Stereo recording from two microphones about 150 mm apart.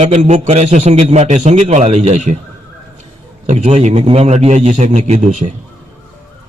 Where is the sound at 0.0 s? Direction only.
50° right (ahead or behind).